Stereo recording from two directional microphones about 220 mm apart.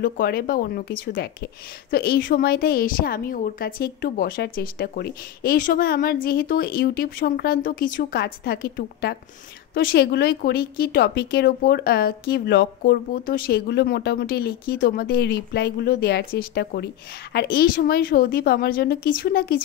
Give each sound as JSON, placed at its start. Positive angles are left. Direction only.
{"t": 0.0, "sound": "speech", "side_deg": 45}